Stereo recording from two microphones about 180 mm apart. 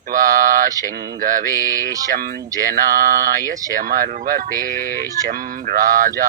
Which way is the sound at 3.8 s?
50° right (ahead or behind).